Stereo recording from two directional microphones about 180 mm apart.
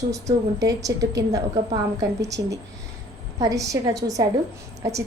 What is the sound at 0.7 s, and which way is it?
A woman's voice, 20° right (ahead or behind).